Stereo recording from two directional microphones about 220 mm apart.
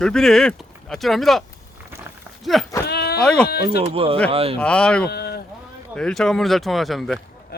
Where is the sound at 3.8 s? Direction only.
25° right (ahead or behind).